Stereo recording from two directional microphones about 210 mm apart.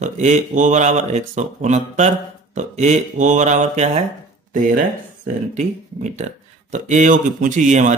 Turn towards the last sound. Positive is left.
turn(degrees=-35)  # may be behind; listen again after turning